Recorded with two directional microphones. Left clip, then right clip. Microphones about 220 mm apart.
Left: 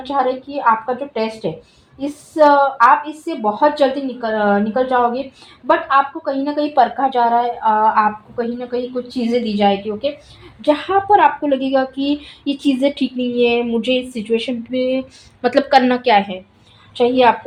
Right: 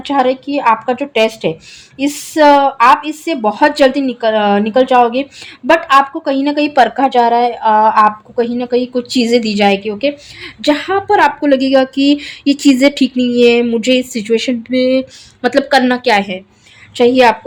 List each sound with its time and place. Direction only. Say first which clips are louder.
0.0 s a woman's voice: right 5 dB; 40° right (ahead or behind)
15.4 s a woman's voice: right 2 dB; 15° right (ahead or behind)